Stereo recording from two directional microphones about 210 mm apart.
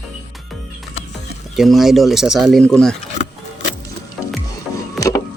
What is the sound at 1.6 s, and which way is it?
Speech, centre (ahead or behind).